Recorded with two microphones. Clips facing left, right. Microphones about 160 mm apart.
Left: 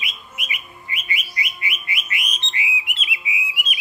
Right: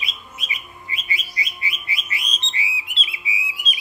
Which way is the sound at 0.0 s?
30° right (ahead or behind).